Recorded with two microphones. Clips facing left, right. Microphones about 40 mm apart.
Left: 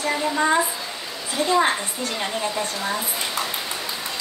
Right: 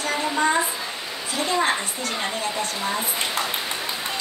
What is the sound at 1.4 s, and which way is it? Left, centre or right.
Speech, right.